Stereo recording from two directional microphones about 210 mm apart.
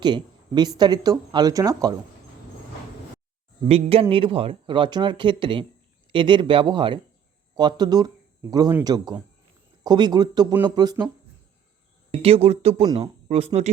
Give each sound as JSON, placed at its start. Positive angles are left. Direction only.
{"t": 0.0, "sound": "speech", "side_deg": -20}
{"t": 3.7, "sound": "speech", "side_deg": -30}
{"t": 12.2, "sound": "speech", "side_deg": -30}
{"t": 12.8, "sound": "speech", "side_deg": -20}
{"t": 13.2, "sound": "speech", "side_deg": -30}